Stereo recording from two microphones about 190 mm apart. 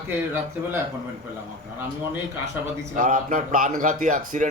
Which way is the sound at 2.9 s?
45° right (ahead or behind).